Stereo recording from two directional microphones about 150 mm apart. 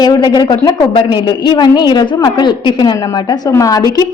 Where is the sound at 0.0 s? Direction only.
30° left (ahead or behind).